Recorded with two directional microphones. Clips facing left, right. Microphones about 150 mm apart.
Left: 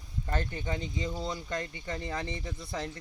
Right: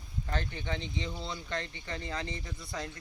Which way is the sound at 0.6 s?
10° left (ahead or behind).